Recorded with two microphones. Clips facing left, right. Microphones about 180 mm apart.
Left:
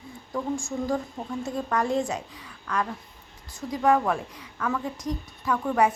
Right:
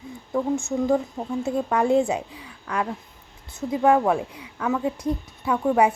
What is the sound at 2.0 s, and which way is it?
Speech, 10° right (ahead or behind).